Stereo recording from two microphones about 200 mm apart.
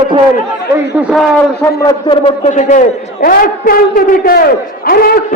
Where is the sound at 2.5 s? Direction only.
35° left (ahead or behind).